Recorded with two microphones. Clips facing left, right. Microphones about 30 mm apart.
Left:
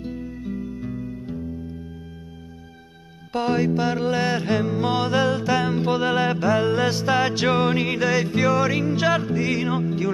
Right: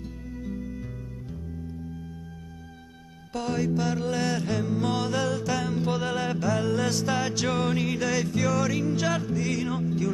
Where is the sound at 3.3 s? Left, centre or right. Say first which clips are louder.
Left 6 dB; left.